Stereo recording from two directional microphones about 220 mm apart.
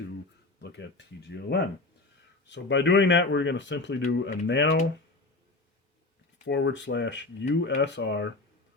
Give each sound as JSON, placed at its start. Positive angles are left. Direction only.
{"t": 0.6, "sound": "speech", "side_deg": 50}
{"t": 6.4, "sound": "speech", "side_deg": 55}